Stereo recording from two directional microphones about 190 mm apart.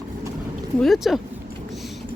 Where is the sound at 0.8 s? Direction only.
Centre (ahead or behind).